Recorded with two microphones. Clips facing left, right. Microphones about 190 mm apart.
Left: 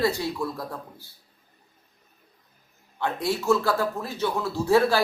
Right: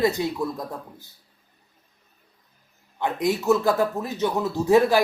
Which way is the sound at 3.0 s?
15° right (ahead or behind).